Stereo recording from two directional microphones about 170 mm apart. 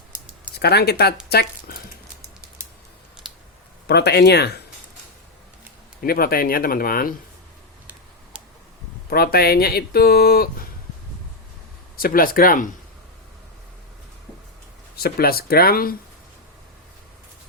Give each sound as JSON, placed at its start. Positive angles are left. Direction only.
{"t": 0.5, "sound": "speech", "side_deg": 70}
{"t": 3.8, "sound": "speech", "side_deg": 75}
{"t": 6.0, "sound": "speech", "side_deg": 60}
{"t": 9.0, "sound": "speech", "side_deg": 65}
{"t": 11.9, "sound": "speech", "side_deg": 60}
{"t": 14.9, "sound": "speech", "side_deg": 65}